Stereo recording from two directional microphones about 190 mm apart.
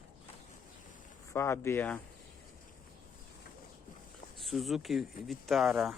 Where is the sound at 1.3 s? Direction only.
15° left (ahead or behind).